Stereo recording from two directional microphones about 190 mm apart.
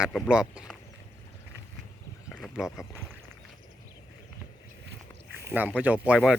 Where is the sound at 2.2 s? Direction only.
5° right (ahead or behind).